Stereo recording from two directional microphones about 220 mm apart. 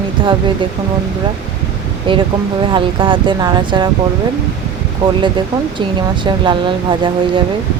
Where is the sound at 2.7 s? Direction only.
25° right (ahead or behind).